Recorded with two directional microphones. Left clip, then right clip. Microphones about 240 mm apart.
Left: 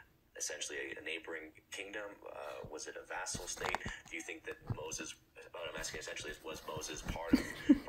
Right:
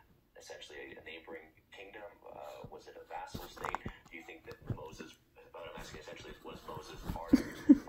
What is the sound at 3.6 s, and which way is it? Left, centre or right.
Speech, centre.